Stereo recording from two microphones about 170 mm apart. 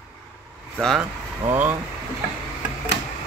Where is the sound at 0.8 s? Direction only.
Centre (ahead or behind).